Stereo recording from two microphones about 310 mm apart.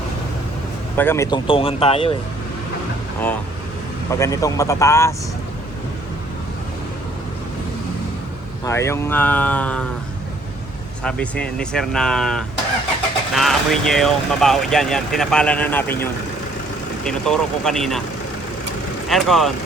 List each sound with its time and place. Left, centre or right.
0.9 s speech: centre
4.1 s speech: centre
8.6 s speech: centre
11.0 s speech: centre
17.1 s speech: centre
19.0 s speech: centre